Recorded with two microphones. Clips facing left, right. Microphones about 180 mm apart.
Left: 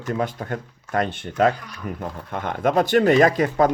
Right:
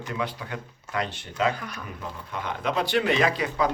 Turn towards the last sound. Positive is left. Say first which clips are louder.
# left 7 dB
turn(degrees=50)  # may be behind; listen again after turning